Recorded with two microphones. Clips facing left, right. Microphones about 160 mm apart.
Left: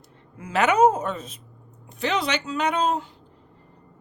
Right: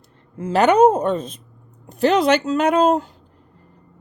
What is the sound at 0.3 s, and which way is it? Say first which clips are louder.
Speech: right 6 dB; 30° right (ahead or behind).